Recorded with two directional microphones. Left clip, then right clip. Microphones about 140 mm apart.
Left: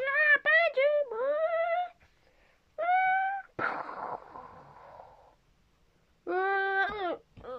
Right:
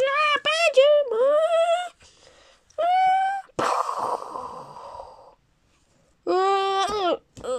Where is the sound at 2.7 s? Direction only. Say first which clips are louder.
Right 7 dB; 20° right (ahead or behind).